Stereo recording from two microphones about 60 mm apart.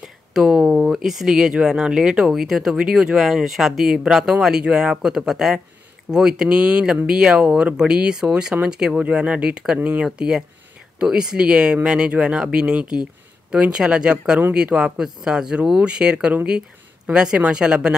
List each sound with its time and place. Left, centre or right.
0.0 s speech: centre